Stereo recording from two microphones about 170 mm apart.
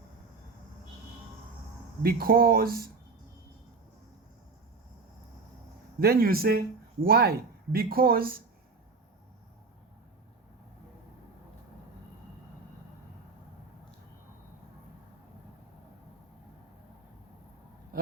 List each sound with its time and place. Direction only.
2.0 s speech: 65° right (ahead or behind)
6.0 s speech: 60° right (ahead or behind)